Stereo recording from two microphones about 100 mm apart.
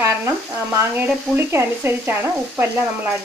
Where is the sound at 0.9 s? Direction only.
20° right (ahead or behind).